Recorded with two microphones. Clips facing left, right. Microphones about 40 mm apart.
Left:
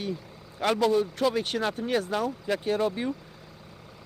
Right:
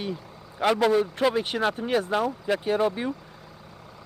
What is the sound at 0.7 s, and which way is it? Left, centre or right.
Speech, right.